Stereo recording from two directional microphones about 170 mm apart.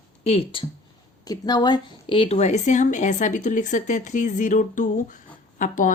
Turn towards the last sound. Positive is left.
turn(degrees=50)  # may be behind; listen again after turning